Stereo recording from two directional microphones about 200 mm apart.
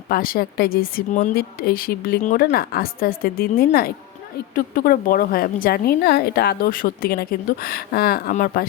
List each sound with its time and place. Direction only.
0.1 s a woman's voice: 45° left (ahead or behind)
8.3 s speech: 40° left (ahead or behind)